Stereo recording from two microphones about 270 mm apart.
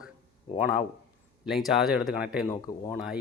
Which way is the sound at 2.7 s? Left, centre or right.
Left.